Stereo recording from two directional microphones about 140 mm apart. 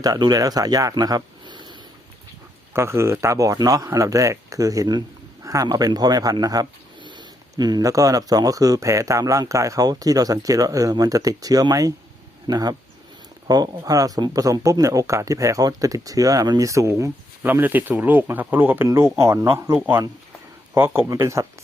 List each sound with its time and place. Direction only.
0.0 s speech: 30° right (ahead or behind)
2.7 s speech: 20° right (ahead or behind)